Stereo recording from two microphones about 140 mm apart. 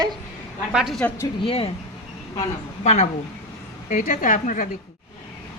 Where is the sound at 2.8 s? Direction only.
55° left (ahead or behind).